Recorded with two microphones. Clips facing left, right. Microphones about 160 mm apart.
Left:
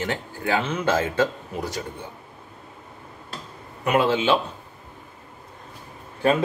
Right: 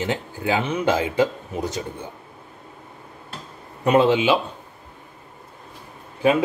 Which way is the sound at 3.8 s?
25° right (ahead or behind).